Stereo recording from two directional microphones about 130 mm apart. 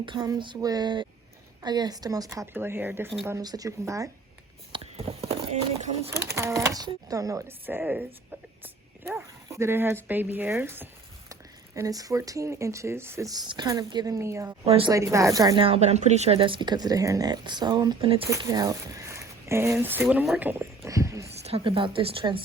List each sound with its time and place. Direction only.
0.0 s speech: 35° right (ahead or behind); by 3.1 s 15° right (ahead or behind)
3.2 s speech: 30° right (ahead or behind)
4.7 s a sound: 50° right (ahead or behind)
6.1 s speech: 20° right (ahead or behind)
14.6 s speech: 50° right (ahead or behind)
14.8 s speech: 25° right (ahead or behind)
15.5 s speech: 45° right (ahead or behind); by 20.2 s 15° right (ahead or behind)
20.3 s a sound: 15° right (ahead or behind)
21.4 s speech: 45° right (ahead or behind)